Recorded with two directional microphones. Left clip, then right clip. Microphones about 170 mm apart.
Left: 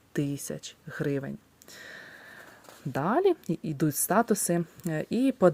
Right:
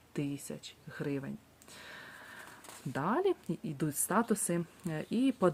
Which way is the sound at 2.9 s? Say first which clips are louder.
Left 7 dB; 30° left (ahead or behind).